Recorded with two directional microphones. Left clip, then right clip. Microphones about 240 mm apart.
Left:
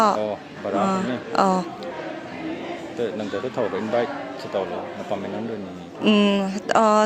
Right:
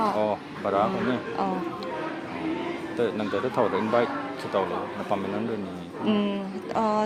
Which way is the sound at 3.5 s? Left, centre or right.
Centre.